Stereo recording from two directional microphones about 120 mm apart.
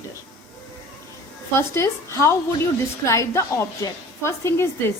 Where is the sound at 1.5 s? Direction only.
25° left (ahead or behind).